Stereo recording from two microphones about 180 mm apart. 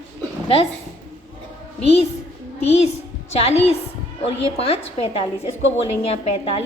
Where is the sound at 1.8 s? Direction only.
35° left (ahead or behind).